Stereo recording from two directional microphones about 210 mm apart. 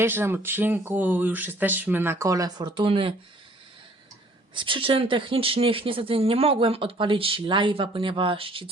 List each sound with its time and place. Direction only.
0.0 s speech: 10° right (ahead or behind)
4.5 s speech: 25° right (ahead or behind)